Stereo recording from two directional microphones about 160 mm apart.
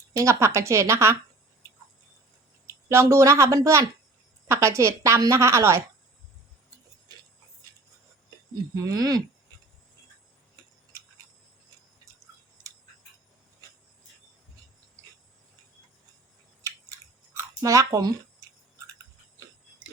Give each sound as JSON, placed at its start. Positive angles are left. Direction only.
{"t": 0.2, "sound": "a woman's voice", "side_deg": -20}
{"t": 2.6, "sound": "a woman's voice", "side_deg": -15}
{"t": 8.7, "sound": "speech", "side_deg": -20}
{"t": 17.3, "sound": "a sound", "side_deg": -20}